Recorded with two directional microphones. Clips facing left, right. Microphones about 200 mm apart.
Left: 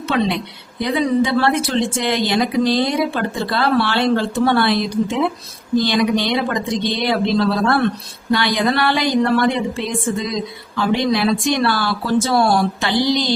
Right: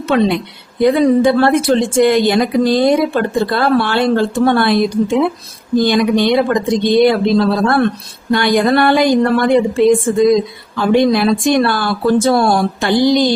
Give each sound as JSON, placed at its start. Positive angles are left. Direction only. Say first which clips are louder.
{"t": 0.1, "sound": "speech", "louder": "right 6 dB", "side_deg": -55}
{"t": 8.3, "sound": "speech", "louder": "right 5 dB", "side_deg": -50}